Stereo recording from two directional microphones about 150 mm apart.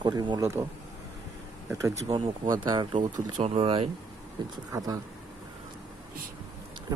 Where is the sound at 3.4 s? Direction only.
40° right (ahead or behind).